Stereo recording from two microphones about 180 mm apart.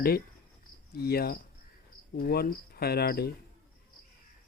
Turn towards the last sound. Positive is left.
turn(degrees=60)  # may be behind; listen again after turning